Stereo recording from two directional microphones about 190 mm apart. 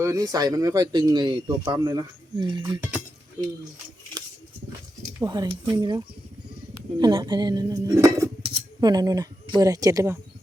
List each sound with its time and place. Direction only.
0.0 s speech: 15° right (ahead or behind)
5.2 s speech: 20° right (ahead or behind)
7.0 s speech: 20° right (ahead or behind)